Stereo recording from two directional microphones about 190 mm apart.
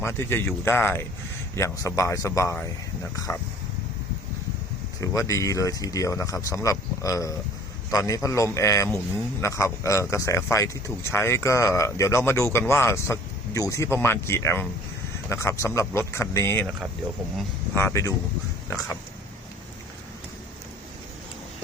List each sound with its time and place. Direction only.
0.0 s speech: 10° left (ahead or behind)
4.9 s speech: 15° left (ahead or behind)
17.7 s speech: 15° left (ahead or behind)